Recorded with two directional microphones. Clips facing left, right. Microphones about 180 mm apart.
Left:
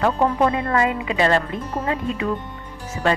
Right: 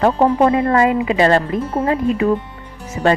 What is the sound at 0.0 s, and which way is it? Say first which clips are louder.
Speech: right 5 dB; 35° right (ahead or behind).